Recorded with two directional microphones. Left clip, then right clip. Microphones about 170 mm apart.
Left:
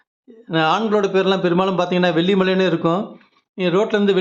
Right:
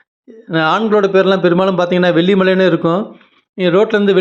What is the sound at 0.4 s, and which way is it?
A man's voice, 20° right (ahead or behind).